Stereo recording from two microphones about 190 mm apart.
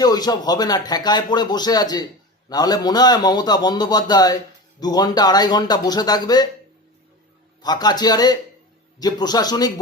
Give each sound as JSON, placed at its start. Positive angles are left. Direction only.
{"t": 0.0, "sound": "speech", "side_deg": 20}
{"t": 7.6, "sound": "speech", "side_deg": 20}